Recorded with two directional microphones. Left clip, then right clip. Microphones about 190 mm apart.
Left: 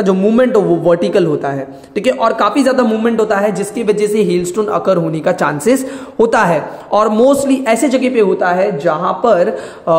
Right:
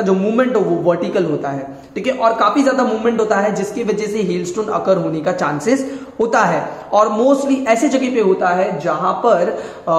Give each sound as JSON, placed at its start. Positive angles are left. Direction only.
{"t": 0.0, "sound": "a woman's voice", "side_deg": 45}